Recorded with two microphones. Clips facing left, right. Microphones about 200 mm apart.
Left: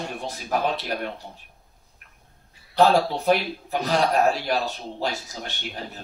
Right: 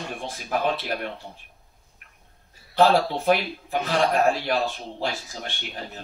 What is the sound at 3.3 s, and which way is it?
A man's voice, 40° left (ahead or behind).